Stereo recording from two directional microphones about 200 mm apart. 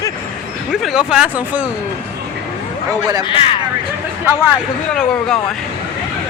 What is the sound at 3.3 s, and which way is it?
Speech, 25° left (ahead or behind).